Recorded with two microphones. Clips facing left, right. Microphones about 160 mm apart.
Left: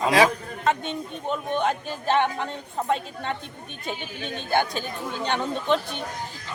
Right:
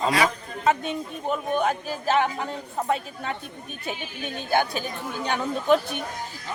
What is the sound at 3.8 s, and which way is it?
A woman's voice, 10° right (ahead or behind).